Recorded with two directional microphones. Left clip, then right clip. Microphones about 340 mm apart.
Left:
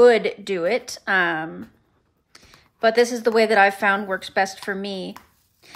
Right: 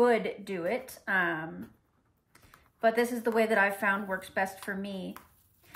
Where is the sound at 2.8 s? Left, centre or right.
Centre.